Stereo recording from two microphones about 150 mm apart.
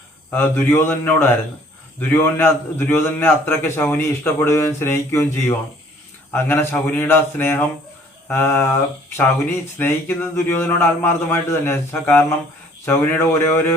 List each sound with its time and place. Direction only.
0.3 s a man's voice: 15° left (ahead or behind)